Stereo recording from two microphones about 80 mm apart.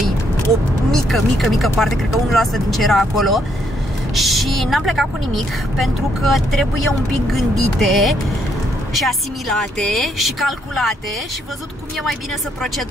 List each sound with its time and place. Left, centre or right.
0.9 s a woman's voice: centre